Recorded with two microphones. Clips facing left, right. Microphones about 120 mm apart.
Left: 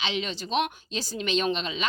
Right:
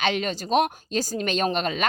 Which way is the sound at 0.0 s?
50° right (ahead or behind).